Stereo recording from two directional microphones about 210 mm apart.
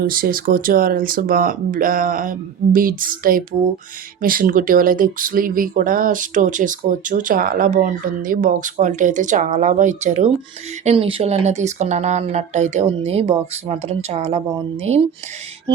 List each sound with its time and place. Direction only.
0.0 s speech: 45° right (ahead or behind)